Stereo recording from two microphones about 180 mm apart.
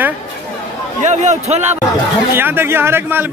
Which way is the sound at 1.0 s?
40° right (ahead or behind).